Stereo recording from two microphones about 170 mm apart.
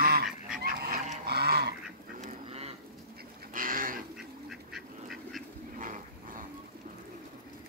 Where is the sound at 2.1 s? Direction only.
40° right (ahead or behind).